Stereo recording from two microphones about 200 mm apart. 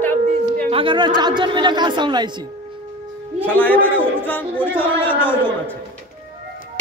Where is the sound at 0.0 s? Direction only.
10° left (ahead or behind).